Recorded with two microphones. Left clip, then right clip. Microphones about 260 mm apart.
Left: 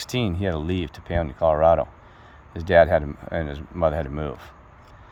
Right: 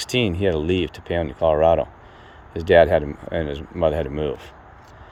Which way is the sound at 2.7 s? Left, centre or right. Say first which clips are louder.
Right 1 dB; left.